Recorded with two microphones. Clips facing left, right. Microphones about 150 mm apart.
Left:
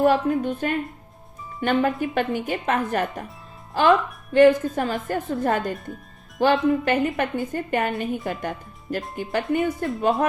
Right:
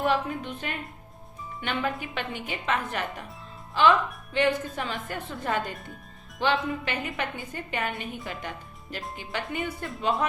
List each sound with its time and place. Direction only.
0.0 s a woman's voice: 45° left (ahead or behind)
5.7 s speech: centre (ahead or behind)
6.4 s a woman's voice: 45° left (ahead or behind)